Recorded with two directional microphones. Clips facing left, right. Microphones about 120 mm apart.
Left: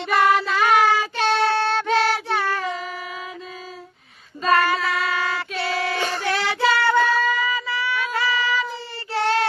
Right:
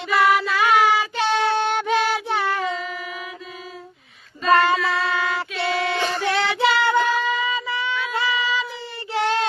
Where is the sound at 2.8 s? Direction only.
35° left (ahead or behind).